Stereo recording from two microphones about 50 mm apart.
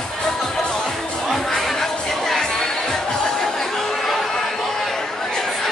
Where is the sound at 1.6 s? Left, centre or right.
Centre.